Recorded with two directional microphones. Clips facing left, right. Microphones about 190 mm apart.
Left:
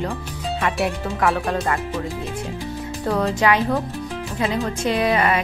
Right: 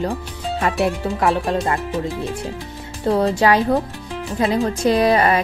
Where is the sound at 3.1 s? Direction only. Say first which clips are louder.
Right 3 dB; 30° right (ahead or behind).